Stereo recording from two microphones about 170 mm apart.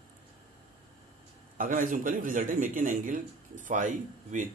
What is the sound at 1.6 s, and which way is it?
Speech, 55° right (ahead or behind).